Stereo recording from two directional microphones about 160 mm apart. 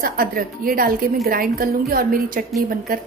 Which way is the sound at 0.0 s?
65° right (ahead or behind).